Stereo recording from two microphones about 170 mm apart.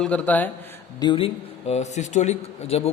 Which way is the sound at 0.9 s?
30° left (ahead or behind).